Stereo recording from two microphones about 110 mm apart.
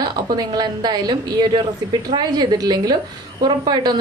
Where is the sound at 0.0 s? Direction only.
40° right (ahead or behind).